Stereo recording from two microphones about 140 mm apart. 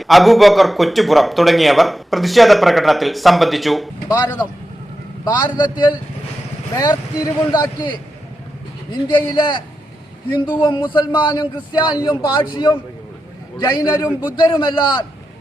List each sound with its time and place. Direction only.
0.0 s a man's voice: centre (ahead or behind)
5.2 s a man's voice: 30° left (ahead or behind)